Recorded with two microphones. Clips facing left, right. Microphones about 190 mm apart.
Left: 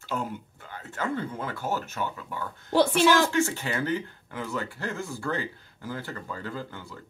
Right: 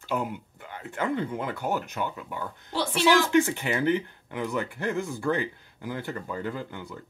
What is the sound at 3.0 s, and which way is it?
Speech, 20° right (ahead or behind).